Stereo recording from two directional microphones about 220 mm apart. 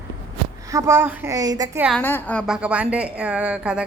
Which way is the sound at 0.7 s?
15° right (ahead or behind).